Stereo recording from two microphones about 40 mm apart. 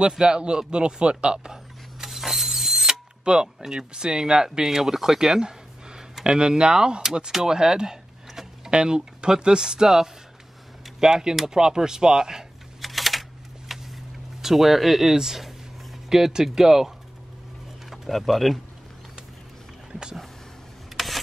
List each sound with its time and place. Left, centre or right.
0.2 s speech: right
2.0 s mechanisms: centre
3.3 s speech: centre
11.0 s speech: centre
12.8 s typing: centre
13.7 s a sound: centre
17.8 s pigeon: centre
18.2 s speech: centre
19.9 s vehicle: centre
20.9 s a sound: centre